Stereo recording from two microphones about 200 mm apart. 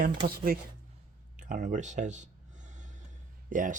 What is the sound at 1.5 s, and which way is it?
Speech, 40° right (ahead or behind).